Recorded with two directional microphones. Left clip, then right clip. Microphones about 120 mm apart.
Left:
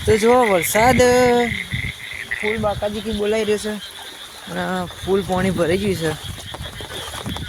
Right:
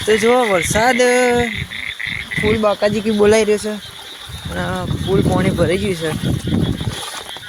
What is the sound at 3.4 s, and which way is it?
Speech, 15° right (ahead or behind).